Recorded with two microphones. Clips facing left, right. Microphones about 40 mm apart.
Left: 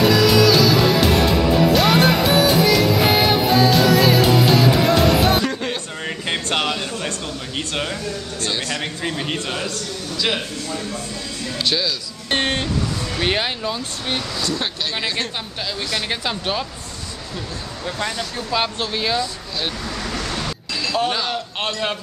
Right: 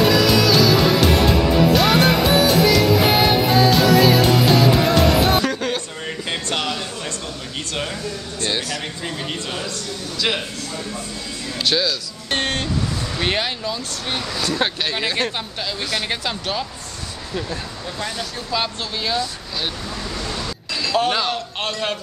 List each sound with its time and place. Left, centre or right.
0.0 s music: centre
5.5 s a sound: centre
9.0 s speech: centre
11.6 s speech: centre
12.3 s music: centre
13.2 s speech: centre
18.0 s speech: centre
20.3 s music: centre